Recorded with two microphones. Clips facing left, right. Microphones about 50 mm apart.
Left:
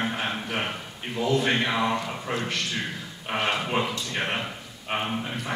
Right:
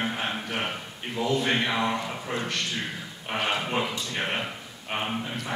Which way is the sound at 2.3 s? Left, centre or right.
Left.